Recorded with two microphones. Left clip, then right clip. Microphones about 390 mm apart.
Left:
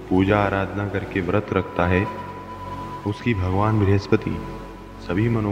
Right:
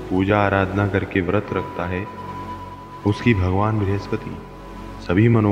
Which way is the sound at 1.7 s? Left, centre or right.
Left.